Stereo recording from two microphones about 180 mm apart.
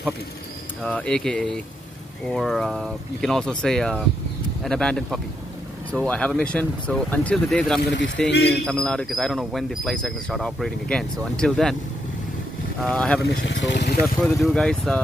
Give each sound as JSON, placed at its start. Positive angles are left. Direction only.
{"t": 0.8, "sound": "speech", "side_deg": 5}
{"t": 8.3, "sound": "speech", "side_deg": 65}
{"t": 8.6, "sound": "speech", "side_deg": 5}
{"t": 12.8, "sound": "speech", "side_deg": 5}
{"t": 13.2, "sound": "speech", "side_deg": 80}
{"t": 14.2, "sound": "speech", "side_deg": 0}